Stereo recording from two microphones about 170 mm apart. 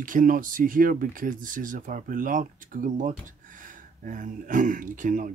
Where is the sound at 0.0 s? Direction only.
55° right (ahead or behind).